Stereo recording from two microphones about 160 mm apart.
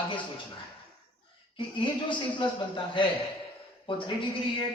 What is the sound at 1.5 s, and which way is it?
A man's voice, 30° left (ahead or behind).